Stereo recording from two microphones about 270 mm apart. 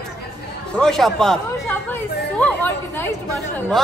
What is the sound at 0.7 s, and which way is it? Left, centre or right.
A man's voice, centre.